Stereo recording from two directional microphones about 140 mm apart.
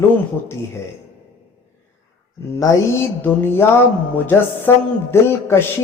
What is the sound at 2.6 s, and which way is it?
Speech, 15° left (ahead or behind).